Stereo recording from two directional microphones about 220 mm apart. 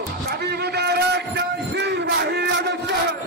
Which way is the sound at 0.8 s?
50° right (ahead or behind).